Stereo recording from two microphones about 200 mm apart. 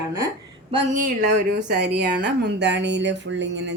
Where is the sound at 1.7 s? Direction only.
55° right (ahead or behind).